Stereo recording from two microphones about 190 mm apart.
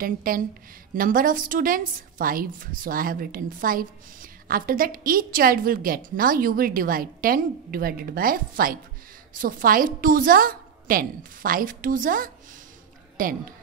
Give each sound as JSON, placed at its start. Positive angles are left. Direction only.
{"t": 0.0, "sound": "a woman's voice", "side_deg": -50}